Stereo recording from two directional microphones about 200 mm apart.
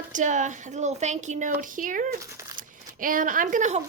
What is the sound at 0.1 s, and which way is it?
A woman's voice, 40° right (ahead or behind).